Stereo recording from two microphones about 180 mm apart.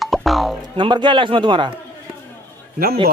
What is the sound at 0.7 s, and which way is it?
Speech, 25° right (ahead or behind).